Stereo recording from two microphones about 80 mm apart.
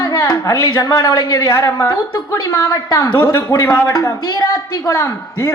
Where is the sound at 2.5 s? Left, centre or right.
Left.